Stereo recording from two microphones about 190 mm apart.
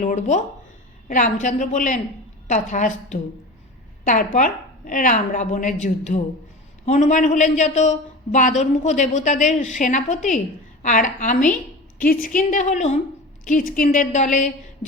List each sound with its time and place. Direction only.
0.0 s a woman's voice: 40° left (ahead or behind)